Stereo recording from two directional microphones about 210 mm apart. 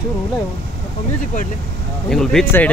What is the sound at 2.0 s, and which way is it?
Speech, centre (ahead or behind).